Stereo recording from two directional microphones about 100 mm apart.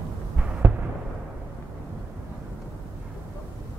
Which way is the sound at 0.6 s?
20° right (ahead or behind).